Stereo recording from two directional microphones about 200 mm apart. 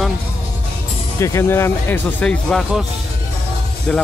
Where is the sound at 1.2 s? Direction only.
15° left (ahead or behind).